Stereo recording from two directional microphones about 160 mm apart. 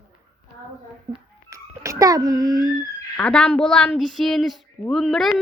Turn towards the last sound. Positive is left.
turn(degrees=0)  # may be behind; listen again after turning